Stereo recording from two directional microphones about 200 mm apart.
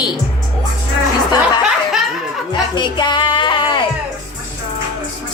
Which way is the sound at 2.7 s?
20° left (ahead or behind).